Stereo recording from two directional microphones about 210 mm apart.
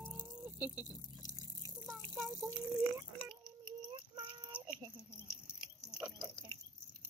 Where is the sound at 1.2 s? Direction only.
15° left (ahead or behind).